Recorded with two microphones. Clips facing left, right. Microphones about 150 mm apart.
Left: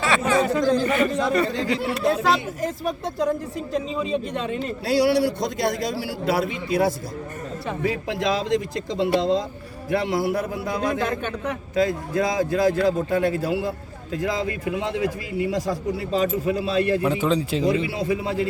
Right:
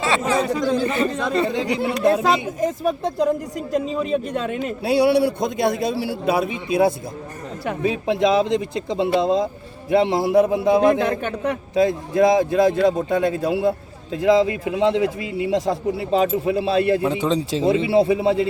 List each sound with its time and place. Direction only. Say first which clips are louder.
0.0 s a man's voice: even; 30° right (ahead or behind)
4.6 s a man's voice: right 3 dB; 20° right (ahead or behind)